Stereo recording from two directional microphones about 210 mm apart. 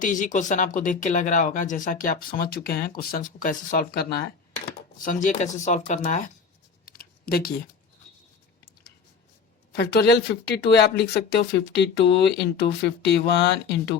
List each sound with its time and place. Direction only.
0.0 s speech: 40° left (ahead or behind)
6.8 s a sound: 45° left (ahead or behind)
9.7 s speech: 50° left (ahead or behind)